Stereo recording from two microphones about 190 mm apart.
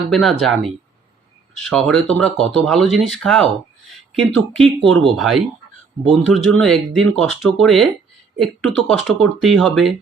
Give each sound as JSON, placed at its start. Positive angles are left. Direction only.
{"t": 0.1, "sound": "speech", "side_deg": 0}